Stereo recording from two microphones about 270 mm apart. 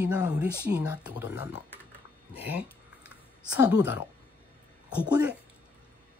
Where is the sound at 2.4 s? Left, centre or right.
Centre.